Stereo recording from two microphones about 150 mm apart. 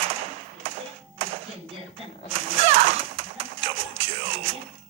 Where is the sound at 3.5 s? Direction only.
40° right (ahead or behind).